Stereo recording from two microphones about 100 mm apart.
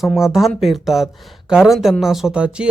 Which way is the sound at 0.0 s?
5° right (ahead or behind).